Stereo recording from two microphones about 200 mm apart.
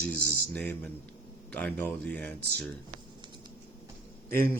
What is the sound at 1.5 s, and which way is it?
Speech, 10° left (ahead or behind).